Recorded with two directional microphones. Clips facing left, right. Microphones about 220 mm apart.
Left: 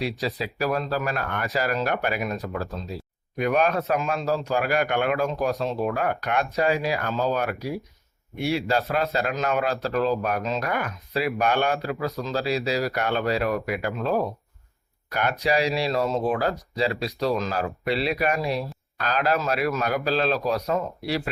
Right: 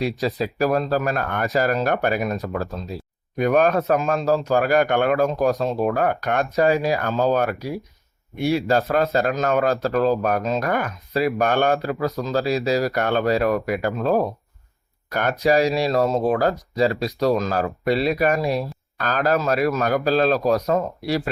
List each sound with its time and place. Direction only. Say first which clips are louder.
0.0 s speech: right 5 dB; 45° right (ahead or behind)